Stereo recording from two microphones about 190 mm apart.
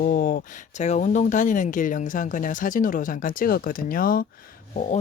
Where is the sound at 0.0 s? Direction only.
45° left (ahead or behind).